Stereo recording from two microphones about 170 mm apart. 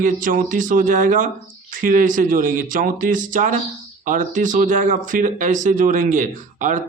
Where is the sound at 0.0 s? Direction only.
50° right (ahead or behind).